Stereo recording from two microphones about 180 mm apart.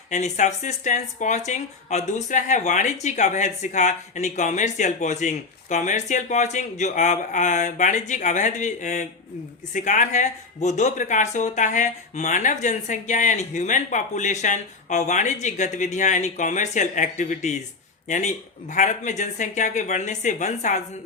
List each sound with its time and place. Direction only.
0.1 s speech: 40° left (ahead or behind)